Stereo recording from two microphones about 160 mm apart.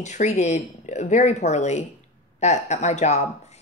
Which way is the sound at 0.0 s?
50° left (ahead or behind).